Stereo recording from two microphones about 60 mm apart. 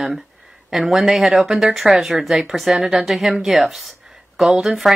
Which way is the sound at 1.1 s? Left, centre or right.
Centre.